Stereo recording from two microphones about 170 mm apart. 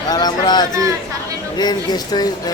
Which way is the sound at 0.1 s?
25° left (ahead or behind).